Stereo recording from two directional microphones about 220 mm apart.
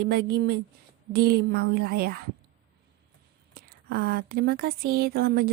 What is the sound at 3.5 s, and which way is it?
Speech, 45° right (ahead or behind).